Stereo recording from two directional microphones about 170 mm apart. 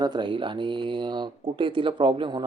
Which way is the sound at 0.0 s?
25° right (ahead or behind).